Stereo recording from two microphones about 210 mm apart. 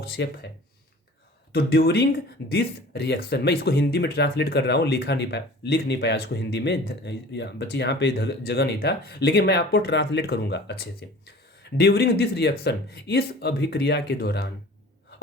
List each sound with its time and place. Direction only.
0.0 s speech: 50° left (ahead or behind)
1.5 s speech: 50° left (ahead or behind)